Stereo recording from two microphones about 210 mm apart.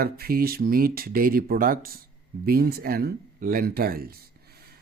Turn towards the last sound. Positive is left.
turn(degrees=-50)  # may be behind; listen again after turning